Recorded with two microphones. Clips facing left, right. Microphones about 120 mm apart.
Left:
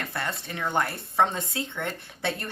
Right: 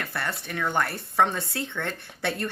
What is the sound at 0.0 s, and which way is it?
A woman's voice, 20° left (ahead or behind).